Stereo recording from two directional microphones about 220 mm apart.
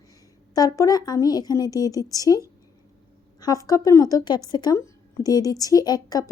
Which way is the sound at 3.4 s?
15° left (ahead or behind).